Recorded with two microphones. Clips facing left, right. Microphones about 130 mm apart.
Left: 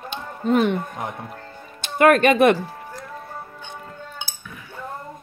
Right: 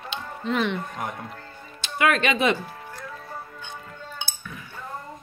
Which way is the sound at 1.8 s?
50° left (ahead or behind).